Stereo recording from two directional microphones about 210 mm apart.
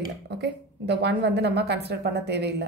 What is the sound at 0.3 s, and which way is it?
A woman's voice, 55° right (ahead or behind).